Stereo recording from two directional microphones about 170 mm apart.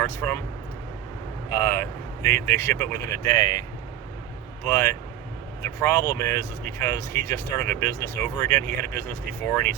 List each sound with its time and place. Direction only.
0.0 s speech: 10° left (ahead or behind)
1.5 s speech: 15° left (ahead or behind)
4.6 s speech: 15° left (ahead or behind)